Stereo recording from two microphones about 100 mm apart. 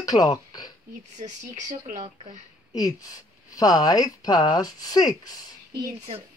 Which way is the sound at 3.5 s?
40° left (ahead or behind).